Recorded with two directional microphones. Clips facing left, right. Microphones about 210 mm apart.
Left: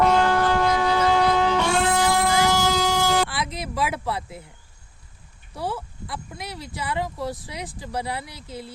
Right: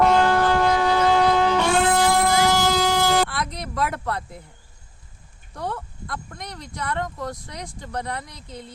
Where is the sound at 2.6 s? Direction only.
55° right (ahead or behind).